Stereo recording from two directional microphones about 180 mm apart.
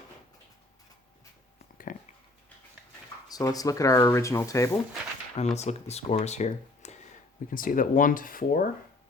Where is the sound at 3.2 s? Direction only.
20° left (ahead or behind).